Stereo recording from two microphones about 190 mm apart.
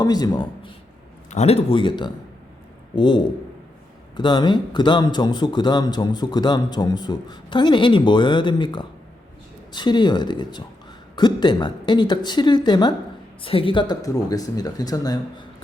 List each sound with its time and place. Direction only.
0.0 s a man's voice: 20° left (ahead or behind)
1.3 s a man's voice: 35° left (ahead or behind)
4.2 s a man's voice: 25° left (ahead or behind)